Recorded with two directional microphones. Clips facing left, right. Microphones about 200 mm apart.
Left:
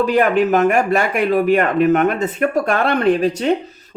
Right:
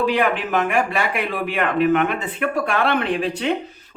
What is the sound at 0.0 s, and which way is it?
Speech, 45° left (ahead or behind).